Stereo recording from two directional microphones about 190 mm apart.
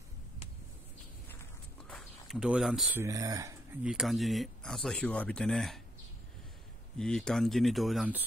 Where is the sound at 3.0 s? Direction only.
15° right (ahead or behind).